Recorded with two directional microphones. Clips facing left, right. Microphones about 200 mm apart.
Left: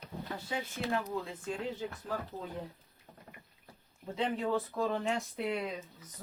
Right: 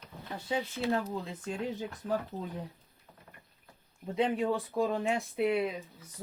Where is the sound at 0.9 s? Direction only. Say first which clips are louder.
Right 1 dB; 30° right (ahead or behind).